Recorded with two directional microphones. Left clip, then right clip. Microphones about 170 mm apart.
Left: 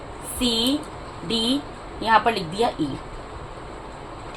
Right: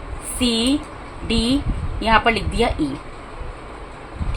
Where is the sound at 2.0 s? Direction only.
40° right (ahead or behind).